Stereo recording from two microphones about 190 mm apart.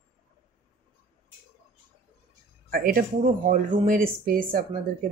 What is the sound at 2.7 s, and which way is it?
Speech, 50° right (ahead or behind).